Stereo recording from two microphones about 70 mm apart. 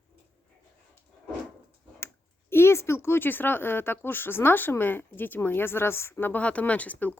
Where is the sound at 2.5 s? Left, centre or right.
Left.